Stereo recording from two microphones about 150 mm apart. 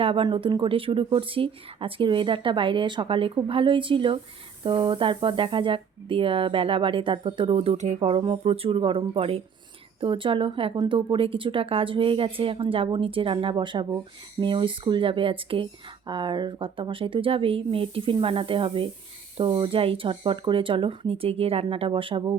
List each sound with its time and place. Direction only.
0.0 s speech: 35° right (ahead or behind)